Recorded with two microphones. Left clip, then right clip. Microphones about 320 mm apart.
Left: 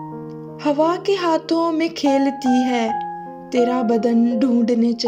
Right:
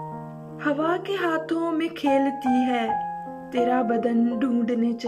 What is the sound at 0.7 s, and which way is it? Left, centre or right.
Speech, centre.